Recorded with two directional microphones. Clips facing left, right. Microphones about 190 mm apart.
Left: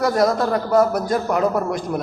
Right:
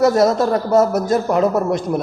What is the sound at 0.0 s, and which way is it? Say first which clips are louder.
A man's voice: right 4 dB; 25° right (ahead or behind).